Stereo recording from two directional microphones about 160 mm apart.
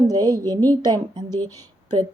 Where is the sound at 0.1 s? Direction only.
25° right (ahead or behind).